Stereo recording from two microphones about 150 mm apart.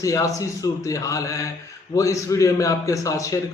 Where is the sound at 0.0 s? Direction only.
20° left (ahead or behind).